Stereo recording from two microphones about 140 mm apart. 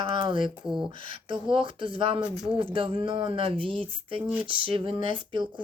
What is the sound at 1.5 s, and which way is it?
Speech, 40° right (ahead or behind).